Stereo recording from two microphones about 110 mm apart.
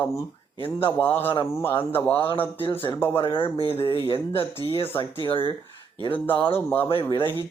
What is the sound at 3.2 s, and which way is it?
Speech, 50° left (ahead or behind).